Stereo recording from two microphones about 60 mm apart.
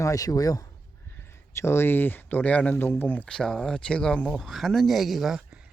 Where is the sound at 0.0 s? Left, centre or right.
Left.